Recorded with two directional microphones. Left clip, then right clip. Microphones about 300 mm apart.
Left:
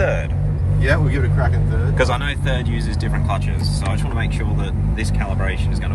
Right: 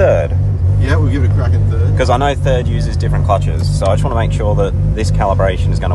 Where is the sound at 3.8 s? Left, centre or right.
Centre.